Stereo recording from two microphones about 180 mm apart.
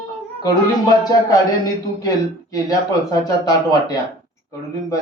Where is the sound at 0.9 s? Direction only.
20° left (ahead or behind).